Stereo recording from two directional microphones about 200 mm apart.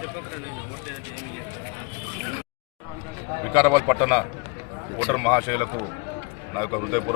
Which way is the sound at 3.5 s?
15° right (ahead or behind).